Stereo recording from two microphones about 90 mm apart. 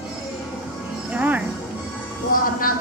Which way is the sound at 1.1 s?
15° right (ahead or behind).